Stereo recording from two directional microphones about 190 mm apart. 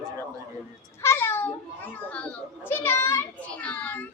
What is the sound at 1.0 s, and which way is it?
A child's voice, 15° left (ahead or behind).